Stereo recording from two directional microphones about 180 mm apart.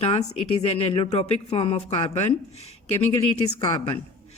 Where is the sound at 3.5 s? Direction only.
25° left (ahead or behind).